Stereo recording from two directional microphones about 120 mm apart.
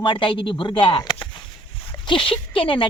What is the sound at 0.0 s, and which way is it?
Speech, 40° left (ahead or behind).